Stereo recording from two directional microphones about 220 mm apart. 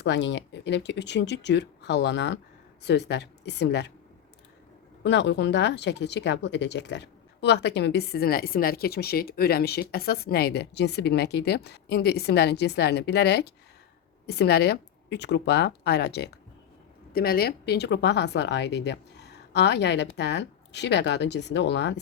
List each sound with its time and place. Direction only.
0.0 s speech: 50° left (ahead or behind)
5.0 s speech: 50° left (ahead or behind)